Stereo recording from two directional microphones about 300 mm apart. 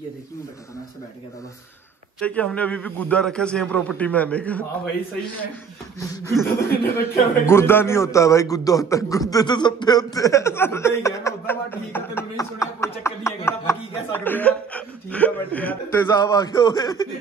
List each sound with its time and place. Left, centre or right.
2.2 s a man's voice: centre
5.9 s a man's voice: centre
6.7 s speech: left
7.4 s a man's voice: centre